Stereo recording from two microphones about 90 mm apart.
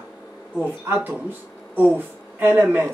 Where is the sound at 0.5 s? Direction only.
20° right (ahead or behind).